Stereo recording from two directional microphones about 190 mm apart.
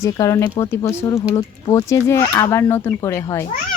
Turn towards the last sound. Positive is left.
turn(degrees=15)  # may be behind; listen again after turning